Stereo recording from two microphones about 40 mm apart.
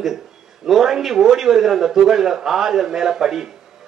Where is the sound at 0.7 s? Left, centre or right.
Centre.